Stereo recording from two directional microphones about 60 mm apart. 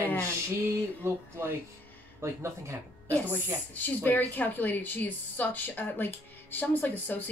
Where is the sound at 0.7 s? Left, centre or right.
Right.